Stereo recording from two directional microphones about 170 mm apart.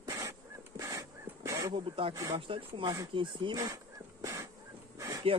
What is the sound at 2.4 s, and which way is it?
Speech, 30° right (ahead or behind).